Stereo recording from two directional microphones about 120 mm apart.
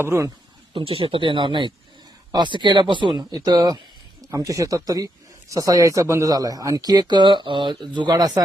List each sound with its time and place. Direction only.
0.0 s speech: 20° right (ahead or behind)
0.7 s speech: 45° right (ahead or behind)